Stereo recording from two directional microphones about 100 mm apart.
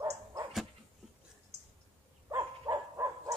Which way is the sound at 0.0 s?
35° right (ahead or behind).